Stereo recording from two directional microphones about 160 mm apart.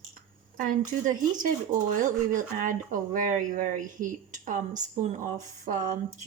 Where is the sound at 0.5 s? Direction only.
55° right (ahead or behind).